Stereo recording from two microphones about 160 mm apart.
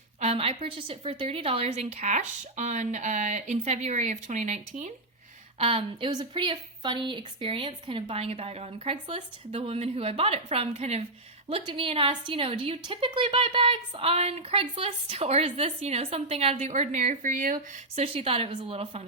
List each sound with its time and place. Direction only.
0.2 s a woman's voice: 40° right (ahead or behind)
5.5 s a woman's voice: 35° right (ahead or behind); by 17.6 s 55° right (ahead or behind)
17.9 s a woman's voice: 40° right (ahead or behind)